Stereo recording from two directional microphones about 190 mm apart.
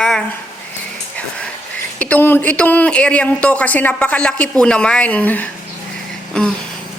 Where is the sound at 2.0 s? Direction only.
10° left (ahead or behind).